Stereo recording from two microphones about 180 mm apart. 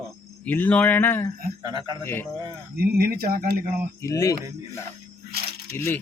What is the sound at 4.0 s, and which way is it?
Speech, 20° left (ahead or behind).